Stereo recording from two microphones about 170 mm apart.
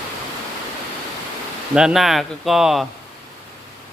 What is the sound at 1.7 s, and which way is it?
Speech, 5° right (ahead or behind).